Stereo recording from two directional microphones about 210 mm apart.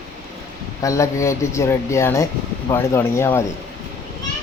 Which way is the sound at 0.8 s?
15° left (ahead or behind).